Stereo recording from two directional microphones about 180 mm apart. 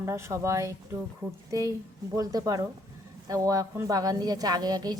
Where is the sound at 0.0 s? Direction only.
15° right (ahead or behind).